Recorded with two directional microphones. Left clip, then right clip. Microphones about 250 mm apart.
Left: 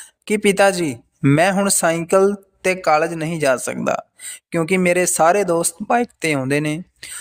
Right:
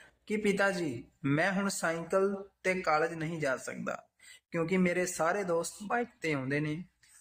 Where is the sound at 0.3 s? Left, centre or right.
Left.